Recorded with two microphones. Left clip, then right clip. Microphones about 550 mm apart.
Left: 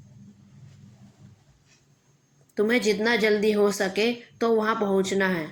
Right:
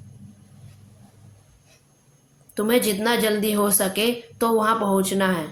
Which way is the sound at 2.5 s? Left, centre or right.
Right.